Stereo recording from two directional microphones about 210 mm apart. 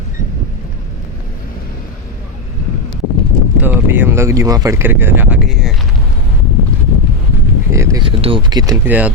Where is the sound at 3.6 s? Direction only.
10° right (ahead or behind).